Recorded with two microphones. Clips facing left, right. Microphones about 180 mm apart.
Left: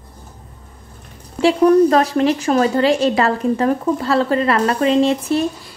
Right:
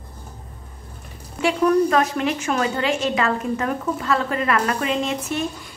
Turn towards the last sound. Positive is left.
turn(degrees=35)  # may be behind; listen again after turning